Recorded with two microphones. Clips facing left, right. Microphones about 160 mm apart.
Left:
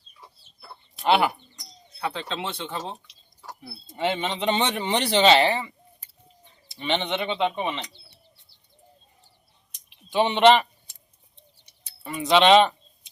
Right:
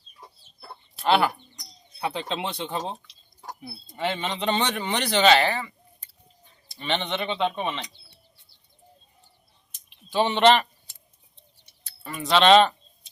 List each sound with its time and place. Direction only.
0.9 s speech: 15° left (ahead or behind)
2.0 s speech: 15° right (ahead or behind)
3.8 s speech: 20° left (ahead or behind)
9.7 s a sound: 15° left (ahead or behind)
11.9 s speech: 20° left (ahead or behind)